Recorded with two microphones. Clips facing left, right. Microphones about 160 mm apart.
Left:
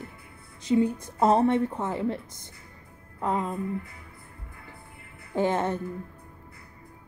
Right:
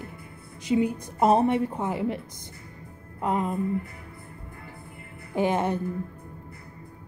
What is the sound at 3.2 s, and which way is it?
Music, 20° right (ahead or behind).